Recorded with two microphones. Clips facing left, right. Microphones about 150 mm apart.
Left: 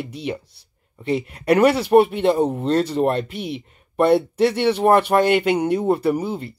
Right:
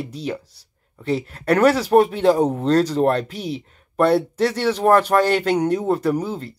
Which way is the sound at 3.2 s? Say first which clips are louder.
Even; 35° right (ahead or behind).